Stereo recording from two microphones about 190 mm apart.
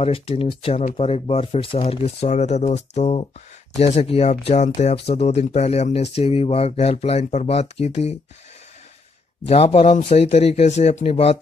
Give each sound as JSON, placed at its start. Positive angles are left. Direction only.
{"t": 0.0, "sound": "speech", "side_deg": 30}
{"t": 9.5, "sound": "speech", "side_deg": 30}